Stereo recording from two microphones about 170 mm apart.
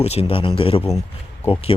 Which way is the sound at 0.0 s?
40° left (ahead or behind).